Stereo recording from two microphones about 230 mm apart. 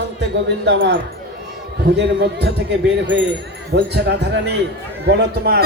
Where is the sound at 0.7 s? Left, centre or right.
Right.